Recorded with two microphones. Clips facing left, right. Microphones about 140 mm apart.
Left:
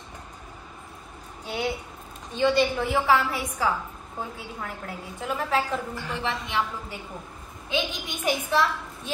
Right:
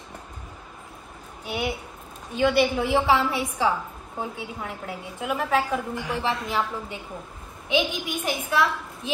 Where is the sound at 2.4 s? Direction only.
10° right (ahead or behind).